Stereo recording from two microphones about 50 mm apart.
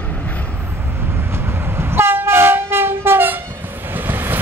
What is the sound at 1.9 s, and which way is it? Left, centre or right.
Train, right.